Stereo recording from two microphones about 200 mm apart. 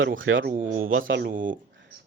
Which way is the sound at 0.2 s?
75° right (ahead or behind).